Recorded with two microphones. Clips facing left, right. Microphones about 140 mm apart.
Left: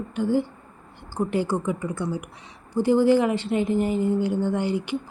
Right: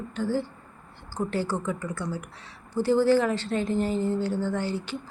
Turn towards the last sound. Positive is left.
turn(degrees=15)  # may be behind; listen again after turning